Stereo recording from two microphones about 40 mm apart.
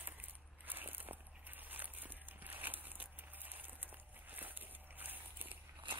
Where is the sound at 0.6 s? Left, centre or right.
Right.